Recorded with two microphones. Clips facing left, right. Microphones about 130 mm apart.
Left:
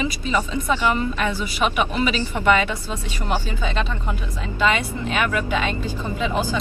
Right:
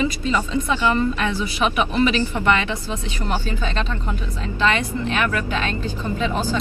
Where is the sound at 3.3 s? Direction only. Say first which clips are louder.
Left 1 dB; 10° left (ahead or behind).